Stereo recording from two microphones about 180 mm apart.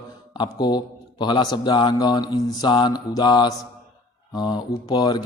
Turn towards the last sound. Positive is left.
turn(degrees=25)  # may be behind; listen again after turning